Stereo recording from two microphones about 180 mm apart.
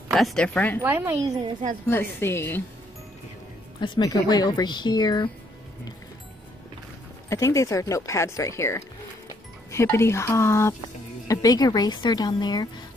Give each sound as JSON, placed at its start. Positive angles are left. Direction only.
{"t": 0.1, "sound": "speech", "side_deg": 0}
{"t": 0.8, "sound": "a woman's voice", "side_deg": -10}
{"t": 1.9, "sound": "speech", "side_deg": 10}
{"t": 3.8, "sound": "speech", "side_deg": 25}
{"t": 7.2, "sound": "speech", "side_deg": 15}